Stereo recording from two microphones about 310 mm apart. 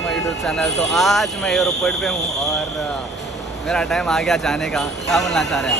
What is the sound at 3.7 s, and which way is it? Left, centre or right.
Speech, centre.